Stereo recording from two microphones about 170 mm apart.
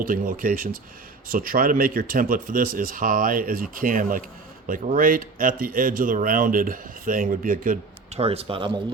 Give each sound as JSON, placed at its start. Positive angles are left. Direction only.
{"t": 0.0, "sound": "speech", "side_deg": -55}
{"t": 8.2, "sound": "speech", "side_deg": -35}